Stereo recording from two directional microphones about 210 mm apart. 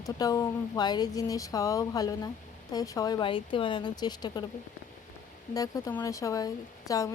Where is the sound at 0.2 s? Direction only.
15° left (ahead or behind).